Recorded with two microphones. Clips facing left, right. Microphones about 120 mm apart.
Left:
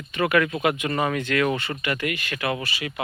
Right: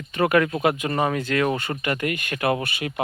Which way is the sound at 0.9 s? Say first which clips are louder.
Right 1 dB; 25° right (ahead or behind).